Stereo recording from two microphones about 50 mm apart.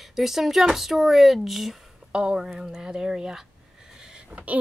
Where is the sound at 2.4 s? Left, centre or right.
Centre.